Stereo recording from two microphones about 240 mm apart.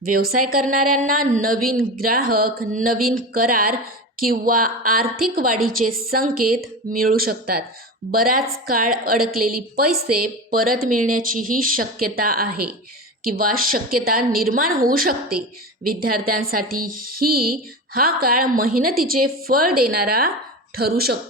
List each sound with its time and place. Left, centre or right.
0.0 s speech: right